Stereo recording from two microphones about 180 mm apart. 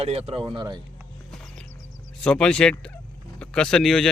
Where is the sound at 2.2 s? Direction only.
5° left (ahead or behind).